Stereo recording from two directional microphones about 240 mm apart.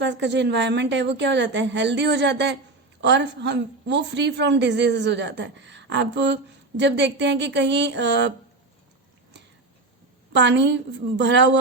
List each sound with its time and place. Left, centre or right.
0.0 s a woman's voice: right
10.3 s a woman's voice: right